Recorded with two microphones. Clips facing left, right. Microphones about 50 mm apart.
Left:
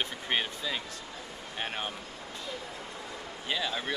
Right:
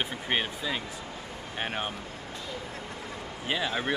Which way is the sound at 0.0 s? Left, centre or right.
Centre.